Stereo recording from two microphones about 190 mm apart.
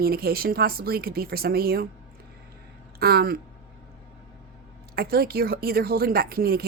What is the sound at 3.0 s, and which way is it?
Speech, 55° right (ahead or behind).